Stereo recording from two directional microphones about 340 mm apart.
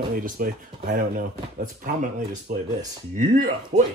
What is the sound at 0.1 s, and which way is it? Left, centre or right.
Speech, right.